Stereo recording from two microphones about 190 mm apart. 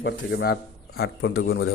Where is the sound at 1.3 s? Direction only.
90° left.